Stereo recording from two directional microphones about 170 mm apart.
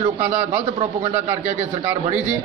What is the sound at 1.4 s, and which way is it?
Speech, 40° right (ahead or behind).